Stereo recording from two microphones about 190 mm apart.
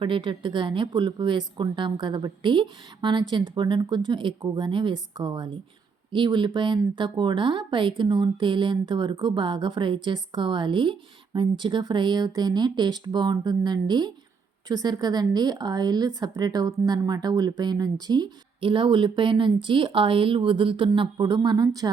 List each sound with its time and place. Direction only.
0.0 s speech: 25° right (ahead or behind)